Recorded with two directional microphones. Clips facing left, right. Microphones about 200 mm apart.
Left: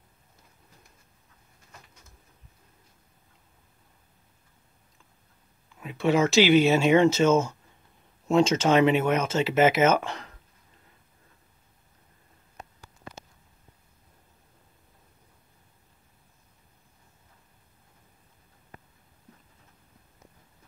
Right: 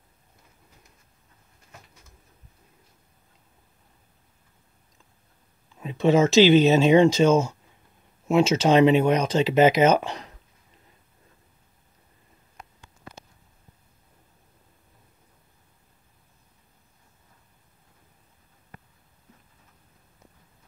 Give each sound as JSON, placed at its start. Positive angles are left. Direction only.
{"t": 5.8, "sound": "speech", "side_deg": -25}